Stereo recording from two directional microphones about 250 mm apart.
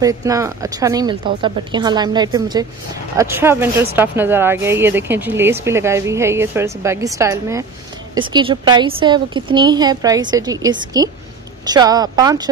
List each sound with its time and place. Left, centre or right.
0.0 s speech: centre